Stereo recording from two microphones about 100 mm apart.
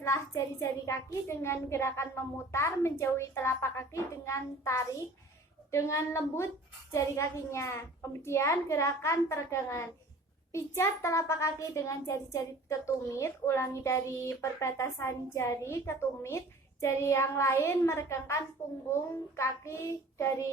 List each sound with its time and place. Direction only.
0.0 s a child's voice: 30° left (ahead or behind)